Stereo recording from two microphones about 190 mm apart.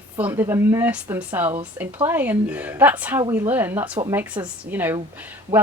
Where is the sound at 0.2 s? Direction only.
10° right (ahead or behind).